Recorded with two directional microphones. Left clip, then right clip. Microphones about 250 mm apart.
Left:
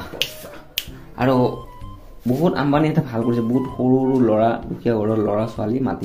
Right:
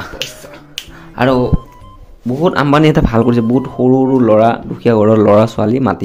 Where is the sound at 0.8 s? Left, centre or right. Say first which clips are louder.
Even; centre.